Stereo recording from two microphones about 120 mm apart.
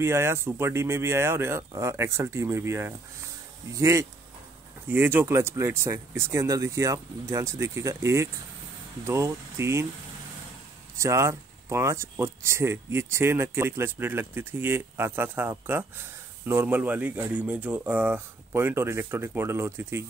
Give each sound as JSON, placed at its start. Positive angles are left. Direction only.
{"t": 0.0, "sound": "speech", "side_deg": -20}
{"t": 11.0, "sound": "speech", "side_deg": -25}